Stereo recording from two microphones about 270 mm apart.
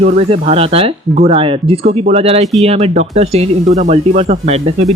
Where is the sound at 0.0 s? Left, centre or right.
Right.